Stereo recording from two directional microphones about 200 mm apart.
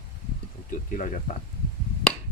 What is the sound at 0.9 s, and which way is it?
Speech, 40° left (ahead or behind).